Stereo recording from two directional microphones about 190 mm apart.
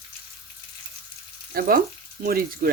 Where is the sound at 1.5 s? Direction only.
50° right (ahead or behind).